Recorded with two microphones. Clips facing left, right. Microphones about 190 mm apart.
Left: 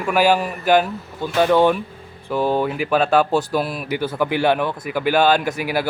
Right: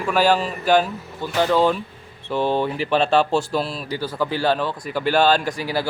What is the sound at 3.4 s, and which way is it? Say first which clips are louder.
A man's voice: left 2 dB; 15° left (ahead or behind).